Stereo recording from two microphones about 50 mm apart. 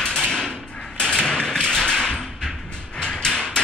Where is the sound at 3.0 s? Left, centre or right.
Centre.